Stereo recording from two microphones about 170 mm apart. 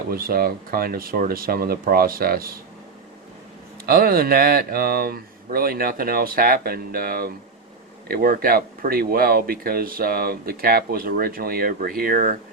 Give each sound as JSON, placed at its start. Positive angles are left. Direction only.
{"t": 0.1, "sound": "speech", "side_deg": -60}
{"t": 3.8, "sound": "speech", "side_deg": -60}